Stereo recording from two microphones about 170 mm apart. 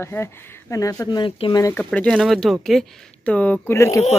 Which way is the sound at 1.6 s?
10° left (ahead or behind).